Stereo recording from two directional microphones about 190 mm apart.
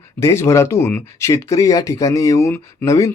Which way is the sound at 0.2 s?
15° left (ahead or behind).